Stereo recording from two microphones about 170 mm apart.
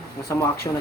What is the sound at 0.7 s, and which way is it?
Speech, 25° left (ahead or behind).